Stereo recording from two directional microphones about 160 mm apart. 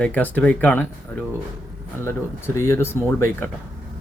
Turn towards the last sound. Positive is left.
turn(degrees=15)  # may be behind; listen again after turning